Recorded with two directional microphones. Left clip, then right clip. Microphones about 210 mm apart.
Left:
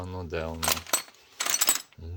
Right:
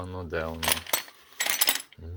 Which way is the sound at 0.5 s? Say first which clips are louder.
Even; 10° left (ahead or behind).